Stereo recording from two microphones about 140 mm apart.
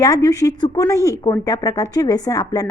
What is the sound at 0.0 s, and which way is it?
Speech, 25° left (ahead or behind).